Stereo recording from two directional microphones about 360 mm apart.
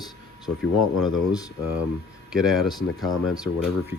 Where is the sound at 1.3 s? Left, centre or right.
Centre.